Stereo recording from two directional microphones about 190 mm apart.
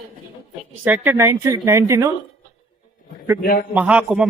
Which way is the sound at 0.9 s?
10° right (ahead or behind).